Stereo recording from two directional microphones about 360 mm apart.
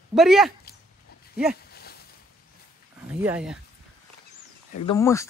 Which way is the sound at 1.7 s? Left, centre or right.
Left.